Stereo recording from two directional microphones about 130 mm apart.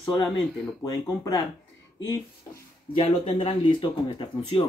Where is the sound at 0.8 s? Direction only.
30° left (ahead or behind).